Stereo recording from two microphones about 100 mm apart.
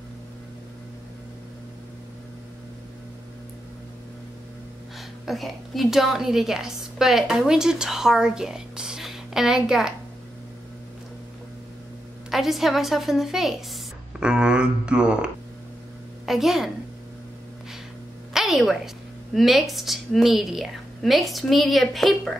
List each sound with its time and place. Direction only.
5.2 s a woman's voice: centre (ahead or behind)
12.3 s a woman's voice: centre (ahead or behind)
18.3 s music: centre (ahead or behind)
19.3 s a woman's voice: centre (ahead or behind)